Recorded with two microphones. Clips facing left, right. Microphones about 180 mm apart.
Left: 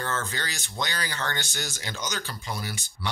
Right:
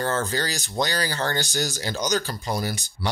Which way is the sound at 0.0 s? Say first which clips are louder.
Right 7 dB; 35° right (ahead or behind).